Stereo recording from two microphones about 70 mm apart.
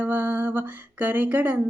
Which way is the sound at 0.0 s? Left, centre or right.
Right.